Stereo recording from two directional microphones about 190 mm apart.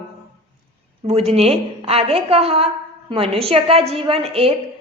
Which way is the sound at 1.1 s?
30° right (ahead or behind).